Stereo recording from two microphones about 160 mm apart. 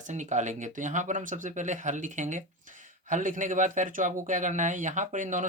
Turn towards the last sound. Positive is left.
turn(degrees=-55)  # may be behind; listen again after turning